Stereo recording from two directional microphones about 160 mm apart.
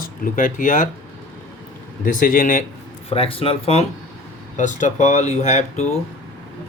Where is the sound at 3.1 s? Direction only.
35° left (ahead or behind).